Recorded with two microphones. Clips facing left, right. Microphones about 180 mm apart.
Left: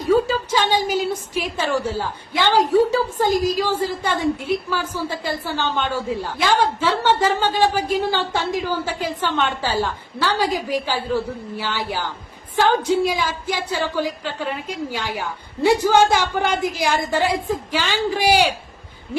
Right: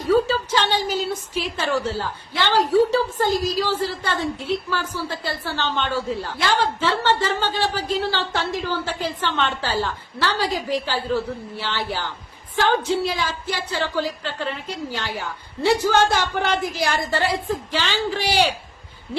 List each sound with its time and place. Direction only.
0.1 s a woman's voice: 10° left (ahead or behind)